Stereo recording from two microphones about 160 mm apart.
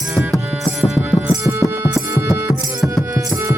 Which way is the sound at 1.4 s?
15° right (ahead or behind).